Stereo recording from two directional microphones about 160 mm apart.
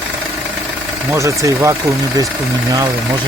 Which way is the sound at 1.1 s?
20° right (ahead or behind).